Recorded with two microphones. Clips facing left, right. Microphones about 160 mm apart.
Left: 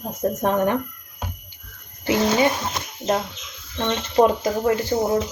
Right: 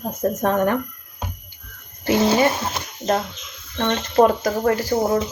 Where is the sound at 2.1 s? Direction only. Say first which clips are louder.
Right 2 dB; 20° right (ahead or behind).